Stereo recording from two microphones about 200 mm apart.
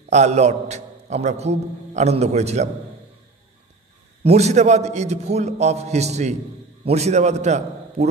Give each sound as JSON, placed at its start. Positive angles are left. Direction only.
{"t": 0.1, "sound": "a man's voice", "side_deg": -35}
{"t": 4.2, "sound": "a man's voice", "side_deg": -35}